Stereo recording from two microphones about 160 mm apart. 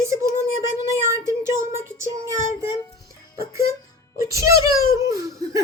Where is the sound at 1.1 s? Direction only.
15° right (ahead or behind).